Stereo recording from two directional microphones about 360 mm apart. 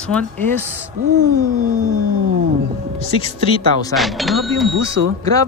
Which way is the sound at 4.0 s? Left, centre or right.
Centre.